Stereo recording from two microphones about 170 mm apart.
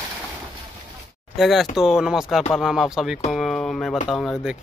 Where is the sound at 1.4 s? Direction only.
Centre (ahead or behind).